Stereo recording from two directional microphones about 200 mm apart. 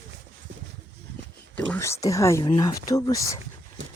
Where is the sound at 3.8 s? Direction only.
70° right (ahead or behind).